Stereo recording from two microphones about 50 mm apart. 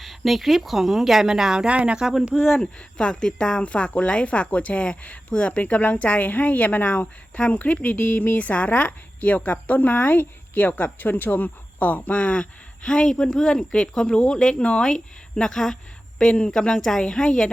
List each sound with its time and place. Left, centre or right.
0.0 s speech: centre
1.6 s speech: right
2.0 s speech: centre
2.6 s speech: centre